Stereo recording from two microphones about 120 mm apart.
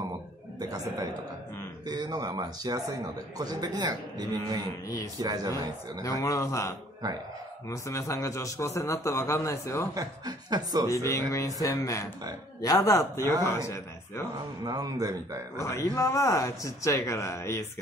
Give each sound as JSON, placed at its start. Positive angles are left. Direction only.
{"t": 0.6, "sound": "a man's voice", "side_deg": -30}
{"t": 4.8, "sound": "a man's voice", "side_deg": 25}
{"t": 5.2, "sound": "a man's voice", "side_deg": -30}
{"t": 6.0, "sound": "a man's voice", "side_deg": 25}
{"t": 7.7, "sound": "a man's voice", "side_deg": 25}
{"t": 9.9, "sound": "speech", "side_deg": -35}
{"t": 10.9, "sound": "a man's voice", "side_deg": 25}
{"t": 14.6, "sound": "a man's voice", "side_deg": -30}
{"t": 15.6, "sound": "a man's voice", "side_deg": 25}